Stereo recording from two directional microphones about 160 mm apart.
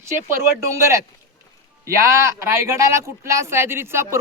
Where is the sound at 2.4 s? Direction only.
20° right (ahead or behind).